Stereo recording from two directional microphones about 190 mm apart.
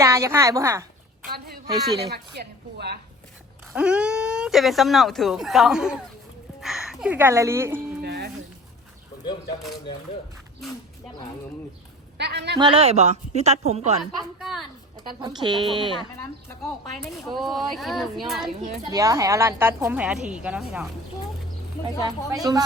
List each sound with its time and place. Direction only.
0.0 s speech: 15° right (ahead or behind)
1.8 s speech: 60° right (ahead or behind)
3.7 s speech: 5° right (ahead or behind)
8.0 s music: 60° right (ahead or behind)
12.1 s a woman's voice: 60° right (ahead or behind)
12.5 s a woman's voice: 25° right (ahead or behind)
14.0 s speech: centre (ahead or behind)
15.2 s speech: 20° right (ahead or behind)
16.0 s speech: 20° left (ahead or behind)
17.0 s speech: centre (ahead or behind)
18.9 s speech: 15° right (ahead or behind)
21.8 s speech: 20° right (ahead or behind)